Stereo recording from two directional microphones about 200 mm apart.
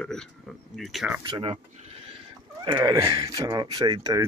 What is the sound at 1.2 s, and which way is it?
Speech, 25° right (ahead or behind).